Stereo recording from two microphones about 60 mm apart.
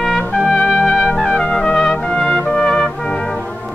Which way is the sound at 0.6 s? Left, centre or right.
Centre.